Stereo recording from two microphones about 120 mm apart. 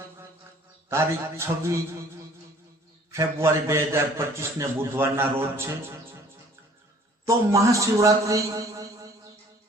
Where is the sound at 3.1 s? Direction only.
25° right (ahead or behind).